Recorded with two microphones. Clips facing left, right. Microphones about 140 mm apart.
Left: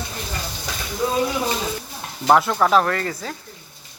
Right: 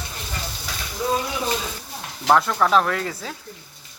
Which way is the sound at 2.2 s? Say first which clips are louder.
Left 2 dB; 5° left (ahead or behind).